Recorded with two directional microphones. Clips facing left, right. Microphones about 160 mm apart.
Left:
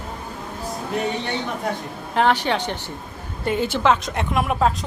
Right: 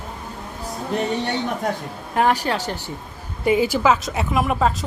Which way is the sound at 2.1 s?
5° right (ahead or behind).